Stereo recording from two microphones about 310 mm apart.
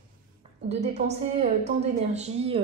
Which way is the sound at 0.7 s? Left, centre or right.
Centre.